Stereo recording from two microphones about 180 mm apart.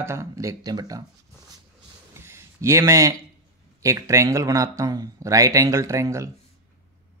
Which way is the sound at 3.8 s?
15° right (ahead or behind).